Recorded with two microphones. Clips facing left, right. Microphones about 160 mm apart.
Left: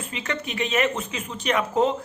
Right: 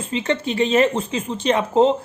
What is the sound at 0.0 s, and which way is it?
Speech, 30° right (ahead or behind).